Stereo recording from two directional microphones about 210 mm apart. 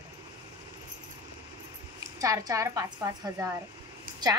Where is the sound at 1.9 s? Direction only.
15° right (ahead or behind).